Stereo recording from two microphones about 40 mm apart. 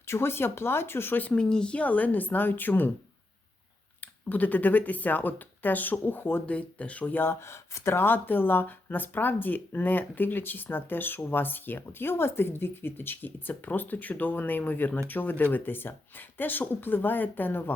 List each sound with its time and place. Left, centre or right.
0.1 s speech: left
1.3 s speech: centre
1.7 s speech: left
4.0 s speech: left
6.4 s speech: left
7.9 s speech: left
13.5 s speech: left